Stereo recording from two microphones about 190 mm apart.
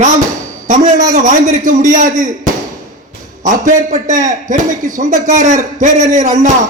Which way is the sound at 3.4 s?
40° right (ahead or behind).